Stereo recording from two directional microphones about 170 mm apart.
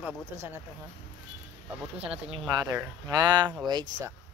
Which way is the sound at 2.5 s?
25° right (ahead or behind).